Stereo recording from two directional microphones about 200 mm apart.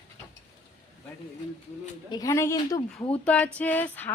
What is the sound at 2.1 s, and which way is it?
A woman's voice, 15° left (ahead or behind).